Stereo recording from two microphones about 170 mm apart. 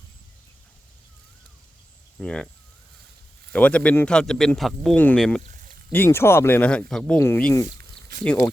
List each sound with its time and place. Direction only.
2.1 s speech: 5° left (ahead or behind)
3.5 s speech: 5° left (ahead or behind)
5.4 s a sound: 45° right (ahead or behind)
5.9 s speech: 15° left (ahead or behind)
7.7 s a sound: 70° right (ahead or behind)
8.2 s speech: 5° left (ahead or behind)